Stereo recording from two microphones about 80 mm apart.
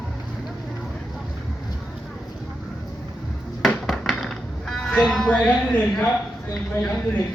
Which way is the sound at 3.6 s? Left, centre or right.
Centre.